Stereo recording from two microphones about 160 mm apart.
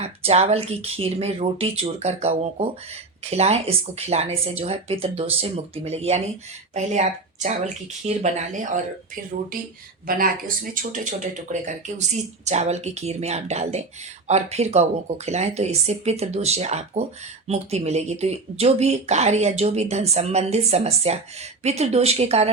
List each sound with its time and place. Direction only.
0.0 s speech: 40° right (ahead or behind)
10.2 s speech: 60° right (ahead or behind); by 22.5 s 40° right (ahead or behind)